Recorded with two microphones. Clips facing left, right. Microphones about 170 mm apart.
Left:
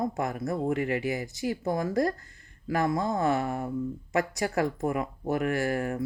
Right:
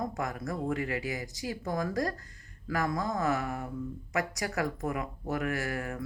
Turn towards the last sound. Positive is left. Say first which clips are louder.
# left 6 dB
turn(degrees=30)  # may be behind; listen again after turning